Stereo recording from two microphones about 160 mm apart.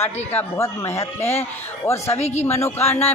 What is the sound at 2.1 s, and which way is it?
Speech, 45° left (ahead or behind).